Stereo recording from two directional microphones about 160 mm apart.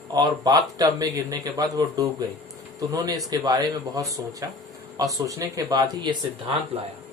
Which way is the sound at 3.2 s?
25° right (ahead or behind).